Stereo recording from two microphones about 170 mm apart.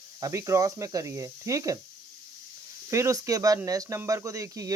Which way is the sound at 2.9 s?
20° right (ahead or behind).